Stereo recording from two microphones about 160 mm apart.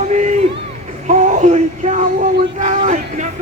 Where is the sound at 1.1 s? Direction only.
50° right (ahead or behind).